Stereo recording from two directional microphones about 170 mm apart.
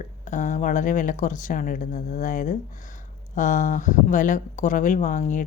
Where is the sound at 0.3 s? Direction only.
45° left (ahead or behind).